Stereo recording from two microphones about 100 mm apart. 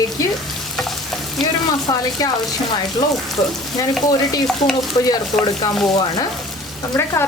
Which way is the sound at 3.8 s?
40° left (ahead or behind).